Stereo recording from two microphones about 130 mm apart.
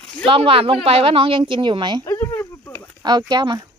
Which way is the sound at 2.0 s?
20° left (ahead or behind).